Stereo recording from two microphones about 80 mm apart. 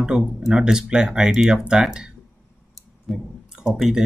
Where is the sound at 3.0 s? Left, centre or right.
Centre.